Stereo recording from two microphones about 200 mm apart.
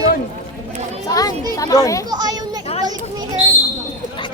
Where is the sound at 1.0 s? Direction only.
20° left (ahead or behind).